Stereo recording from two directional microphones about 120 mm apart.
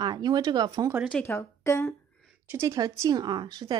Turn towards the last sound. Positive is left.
turn(degrees=-35)  # may be behind; listen again after turning